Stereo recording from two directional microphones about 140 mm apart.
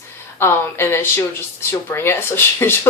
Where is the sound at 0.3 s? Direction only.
15° left (ahead or behind).